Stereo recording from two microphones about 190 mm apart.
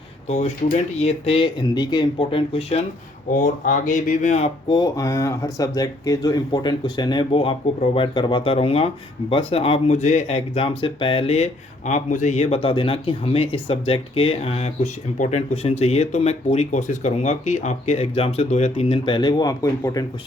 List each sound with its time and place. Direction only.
0.3 s speech: 35° left (ahead or behind)
3.3 s speech: 45° left (ahead or behind); by 20.1 s 15° left (ahead or behind)